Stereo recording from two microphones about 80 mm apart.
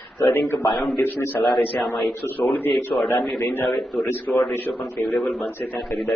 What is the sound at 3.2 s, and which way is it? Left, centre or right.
A man's voice, centre.